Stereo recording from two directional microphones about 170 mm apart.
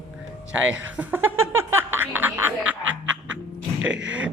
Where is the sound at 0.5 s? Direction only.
5° right (ahead or behind).